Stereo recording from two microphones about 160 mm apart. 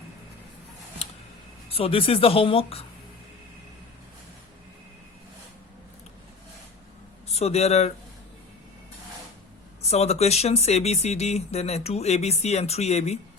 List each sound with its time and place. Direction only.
1.7 s speech: 35° left (ahead or behind)
7.3 s speech: 40° left (ahead or behind)
9.8 s speech: 40° left (ahead or behind)